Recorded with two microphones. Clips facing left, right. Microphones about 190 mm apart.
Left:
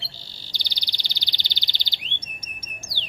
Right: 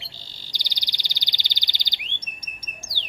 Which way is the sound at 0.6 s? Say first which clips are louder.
Even; 15° right (ahead or behind).